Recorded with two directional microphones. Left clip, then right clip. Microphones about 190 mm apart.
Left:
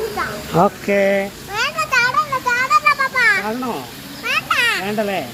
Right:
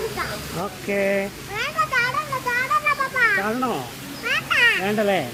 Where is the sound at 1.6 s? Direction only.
40° left (ahead or behind).